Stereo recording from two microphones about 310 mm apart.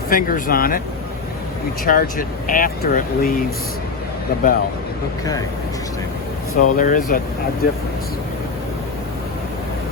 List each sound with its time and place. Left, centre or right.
0.1 s speech: left
1.8 s speech: left
6.6 s speech: left